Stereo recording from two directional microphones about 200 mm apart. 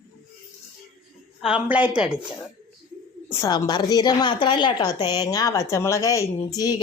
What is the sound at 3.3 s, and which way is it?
A woman's voice, 15° left (ahead or behind).